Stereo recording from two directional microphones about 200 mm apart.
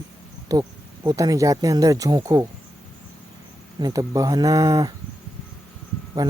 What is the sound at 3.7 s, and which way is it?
Speech, 20° right (ahead or behind).